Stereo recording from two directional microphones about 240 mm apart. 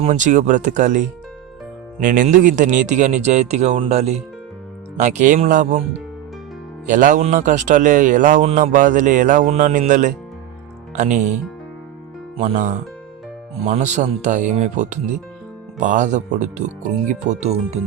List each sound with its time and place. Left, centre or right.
0.0 s speech: right
2.0 s speech: right
6.8 s speech: right
12.4 s speech: right